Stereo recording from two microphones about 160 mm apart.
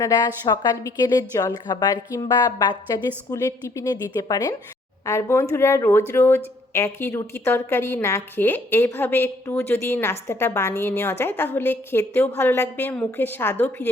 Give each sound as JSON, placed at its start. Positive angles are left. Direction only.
{"t": 0.0, "sound": "a woman's voice", "side_deg": 25}